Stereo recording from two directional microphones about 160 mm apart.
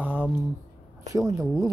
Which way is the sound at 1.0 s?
20° right (ahead or behind).